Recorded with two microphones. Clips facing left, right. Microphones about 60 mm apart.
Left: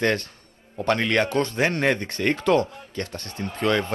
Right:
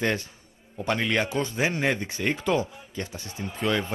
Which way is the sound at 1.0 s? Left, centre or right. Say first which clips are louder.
Left 2 dB; centre.